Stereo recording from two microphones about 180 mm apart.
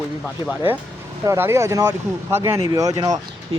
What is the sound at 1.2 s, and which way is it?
Speech, 15° right (ahead or behind).